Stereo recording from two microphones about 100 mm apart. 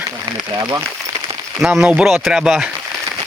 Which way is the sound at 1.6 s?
5° right (ahead or behind).